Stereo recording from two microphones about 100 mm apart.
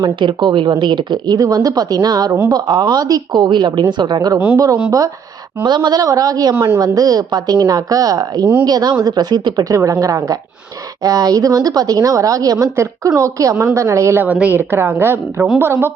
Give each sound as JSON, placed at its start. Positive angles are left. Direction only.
{"t": 0.0, "sound": "a woman's voice", "side_deg": -50}
{"t": 5.6, "sound": "a woman's voice", "side_deg": -45}
{"t": 9.7, "sound": "a woman's voice", "side_deg": -35}
{"t": 14.3, "sound": "a woman's voice", "side_deg": -15}